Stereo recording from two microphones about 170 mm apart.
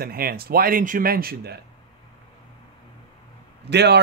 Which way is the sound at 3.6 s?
80° right.